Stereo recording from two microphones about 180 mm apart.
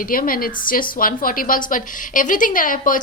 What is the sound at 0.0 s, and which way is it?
A woman's voice, 50° left (ahead or behind).